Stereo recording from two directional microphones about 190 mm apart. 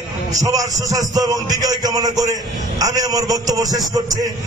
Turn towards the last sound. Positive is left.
turn(degrees=-20)  # may be behind; listen again after turning